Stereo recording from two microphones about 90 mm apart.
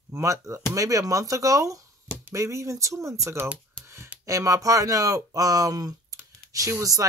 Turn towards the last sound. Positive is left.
turn(degrees=-40)  # may be behind; listen again after turning